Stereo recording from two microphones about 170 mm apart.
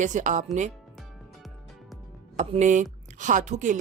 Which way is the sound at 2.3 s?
45° right (ahead or behind).